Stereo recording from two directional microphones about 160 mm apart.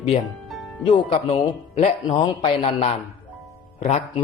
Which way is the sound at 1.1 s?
35° left (ahead or behind).